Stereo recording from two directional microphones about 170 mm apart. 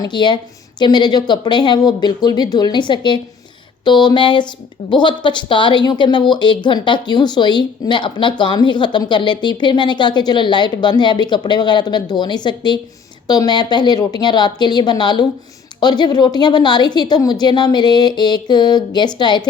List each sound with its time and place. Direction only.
0.0 s speech: 25° left (ahead or behind)